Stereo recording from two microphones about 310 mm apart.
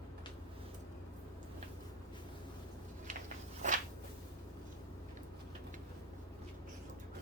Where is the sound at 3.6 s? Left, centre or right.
Right.